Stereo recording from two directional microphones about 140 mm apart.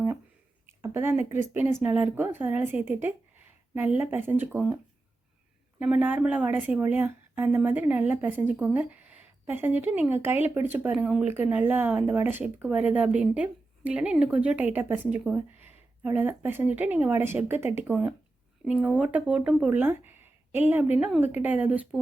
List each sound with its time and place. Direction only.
0.8 s a woman's voice: 15° right (ahead or behind)
5.8 s a woman's voice: 10° right (ahead or behind)